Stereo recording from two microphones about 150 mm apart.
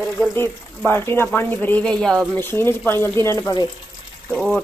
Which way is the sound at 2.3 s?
15° left (ahead or behind).